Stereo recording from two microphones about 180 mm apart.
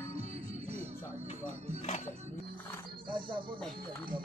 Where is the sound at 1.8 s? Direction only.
40° left (ahead or behind).